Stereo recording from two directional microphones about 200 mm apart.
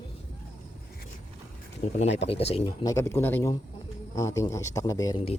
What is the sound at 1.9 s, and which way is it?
Speech, 35° left (ahead or behind).